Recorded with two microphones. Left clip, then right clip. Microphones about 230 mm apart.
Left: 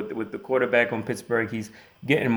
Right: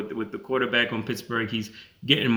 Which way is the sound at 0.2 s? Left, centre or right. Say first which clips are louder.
Left 2 dB; centre.